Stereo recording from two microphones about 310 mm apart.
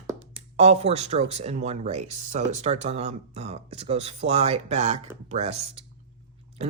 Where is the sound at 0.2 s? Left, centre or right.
Right.